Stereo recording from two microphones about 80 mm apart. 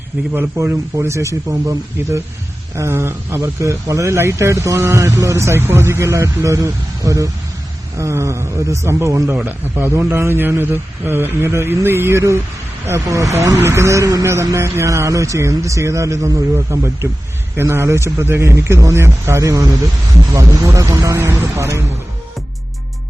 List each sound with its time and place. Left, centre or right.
0.3 s speech: right
9.3 s a man's voice: right